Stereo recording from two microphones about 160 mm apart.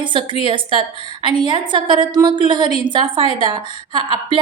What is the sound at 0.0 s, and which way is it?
A woman's voice, 30° right (ahead or behind).